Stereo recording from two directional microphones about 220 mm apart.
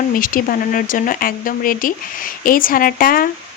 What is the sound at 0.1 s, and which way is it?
Speech, 40° left (ahead or behind).